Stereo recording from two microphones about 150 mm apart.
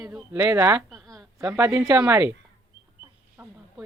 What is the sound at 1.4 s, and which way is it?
Speech, 15° right (ahead or behind).